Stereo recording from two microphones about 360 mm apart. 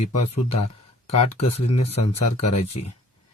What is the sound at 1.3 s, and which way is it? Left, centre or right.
Speech, centre.